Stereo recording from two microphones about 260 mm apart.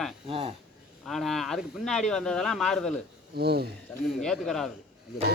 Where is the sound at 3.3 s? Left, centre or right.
Right.